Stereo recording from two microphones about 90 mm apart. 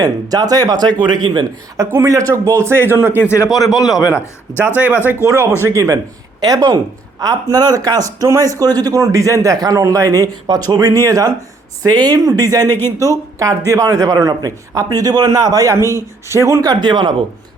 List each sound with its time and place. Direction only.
0.0 s speech: 45° right (ahead or behind)
1.8 s a man's voice: 35° right (ahead or behind)
3.2 s speech: 35° left (ahead or behind)
4.6 s a man's voice: 20° right (ahead or behind)
16.6 s speech: 55° right (ahead or behind)